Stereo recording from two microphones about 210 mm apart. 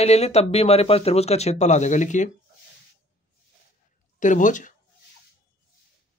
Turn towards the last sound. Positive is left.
turn(degrees=35)  # may be behind; listen again after turning